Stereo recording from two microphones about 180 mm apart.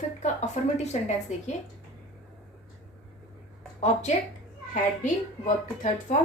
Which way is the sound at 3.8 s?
40° left (ahead or behind).